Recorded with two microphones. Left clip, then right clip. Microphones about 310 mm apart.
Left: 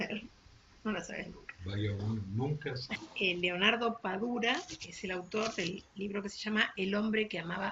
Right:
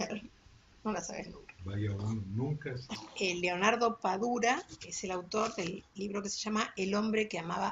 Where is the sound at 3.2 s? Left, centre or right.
Centre.